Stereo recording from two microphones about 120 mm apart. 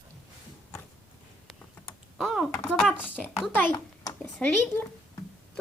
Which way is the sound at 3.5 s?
15° left (ahead or behind).